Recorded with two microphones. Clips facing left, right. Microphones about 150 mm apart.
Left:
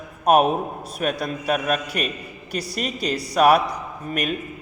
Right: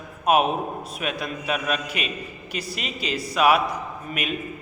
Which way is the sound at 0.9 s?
40° left (ahead or behind).